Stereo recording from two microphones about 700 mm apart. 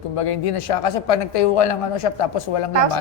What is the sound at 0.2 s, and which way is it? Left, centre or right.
A woman's voice, left.